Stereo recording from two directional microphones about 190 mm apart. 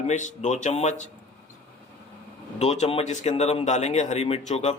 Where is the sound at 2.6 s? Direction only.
35° left (ahead or behind).